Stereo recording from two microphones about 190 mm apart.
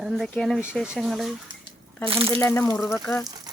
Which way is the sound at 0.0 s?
Centre (ahead or behind).